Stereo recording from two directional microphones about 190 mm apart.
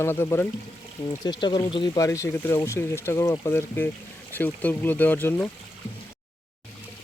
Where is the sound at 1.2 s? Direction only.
20° left (ahead or behind).